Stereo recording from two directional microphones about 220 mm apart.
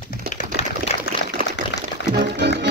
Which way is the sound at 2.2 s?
50° right (ahead or behind).